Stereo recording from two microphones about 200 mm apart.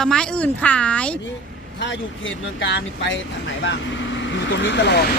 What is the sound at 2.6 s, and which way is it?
Speech, 70° left (ahead or behind).